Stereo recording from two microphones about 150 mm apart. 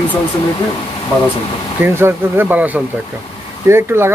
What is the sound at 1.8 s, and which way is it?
Speech, 15° right (ahead or behind).